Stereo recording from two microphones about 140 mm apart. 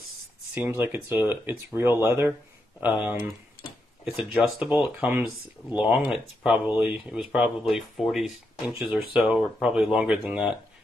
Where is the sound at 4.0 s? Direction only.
5° right (ahead or behind).